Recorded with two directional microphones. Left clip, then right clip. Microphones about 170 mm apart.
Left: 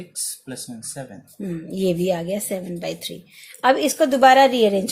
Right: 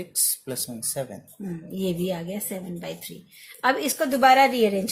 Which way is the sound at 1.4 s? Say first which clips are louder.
Left 7 dB; 40° left (ahead or behind).